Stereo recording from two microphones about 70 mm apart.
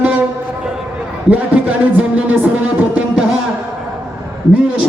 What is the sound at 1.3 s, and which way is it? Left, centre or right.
Music, right.